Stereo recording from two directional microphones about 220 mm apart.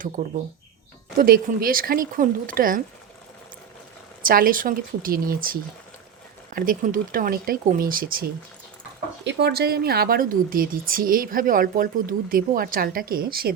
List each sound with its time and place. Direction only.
0.2 s speech: 40° right (ahead or behind)
4.2 s speech: 40° right (ahead or behind)